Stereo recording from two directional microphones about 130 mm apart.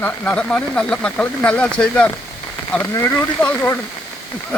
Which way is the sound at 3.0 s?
20° left (ahead or behind).